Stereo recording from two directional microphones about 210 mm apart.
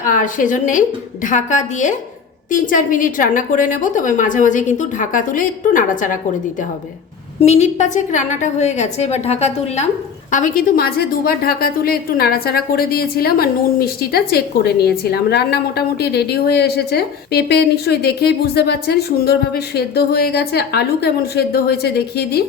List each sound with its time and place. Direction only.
0.0 s a woman's voice: 40° left (ahead or behind)
7.4 s a woman's voice: 35° left (ahead or behind); by 22.4 s 50° left (ahead or behind)